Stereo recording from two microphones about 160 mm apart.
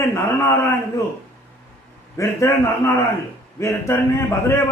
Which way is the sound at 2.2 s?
20° left (ahead or behind).